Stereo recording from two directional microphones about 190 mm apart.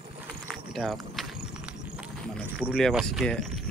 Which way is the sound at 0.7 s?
Centre (ahead or behind).